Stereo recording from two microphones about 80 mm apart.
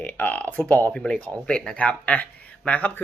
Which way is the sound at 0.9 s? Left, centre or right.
Centre.